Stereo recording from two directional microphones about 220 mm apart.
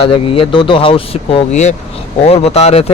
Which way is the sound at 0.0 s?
25° left (ahead or behind).